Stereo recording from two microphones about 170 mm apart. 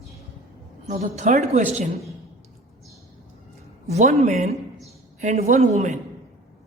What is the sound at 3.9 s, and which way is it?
A man's voice, 45° right (ahead or behind).